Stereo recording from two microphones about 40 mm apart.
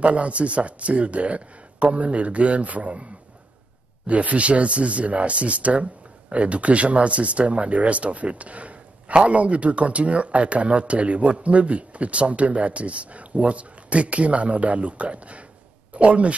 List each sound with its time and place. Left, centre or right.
0.0 s speech: right
4.1 s speech: right